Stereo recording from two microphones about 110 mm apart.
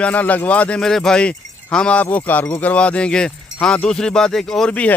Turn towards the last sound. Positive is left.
turn(degrees=10)  # may be behind; listen again after turning